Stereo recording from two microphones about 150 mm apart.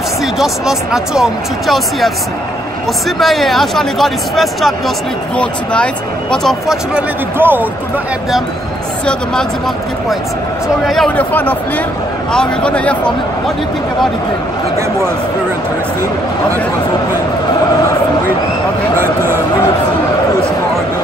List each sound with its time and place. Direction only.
0.2 s speech: centre (ahead or behind)
3.2 s speech: centre (ahead or behind)
7.3 s speech: 15° right (ahead or behind)
9.0 s speech: 5° left (ahead or behind)
10.9 s speech: 5° left (ahead or behind)
18.9 s a sound: 15° right (ahead or behind)